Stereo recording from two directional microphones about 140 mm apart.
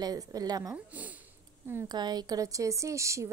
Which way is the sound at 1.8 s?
30° right (ahead or behind).